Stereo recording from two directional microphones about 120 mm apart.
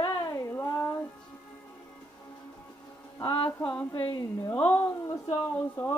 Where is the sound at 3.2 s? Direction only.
45° left (ahead or behind).